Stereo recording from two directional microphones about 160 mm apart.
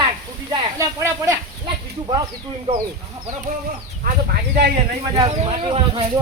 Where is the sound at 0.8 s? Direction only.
20° right (ahead or behind).